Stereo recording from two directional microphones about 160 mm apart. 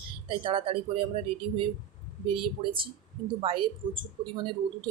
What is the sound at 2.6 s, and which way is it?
Speech, 35° right (ahead or behind).